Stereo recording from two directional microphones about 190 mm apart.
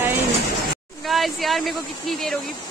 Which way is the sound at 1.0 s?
Centre (ahead or behind).